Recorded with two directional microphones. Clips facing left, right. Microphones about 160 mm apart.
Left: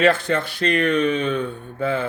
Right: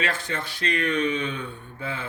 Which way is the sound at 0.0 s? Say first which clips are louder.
Left 11 dB; 70° left (ahead or behind).